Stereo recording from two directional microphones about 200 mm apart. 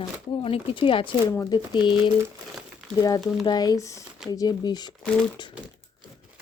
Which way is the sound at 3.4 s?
20° left (ahead or behind).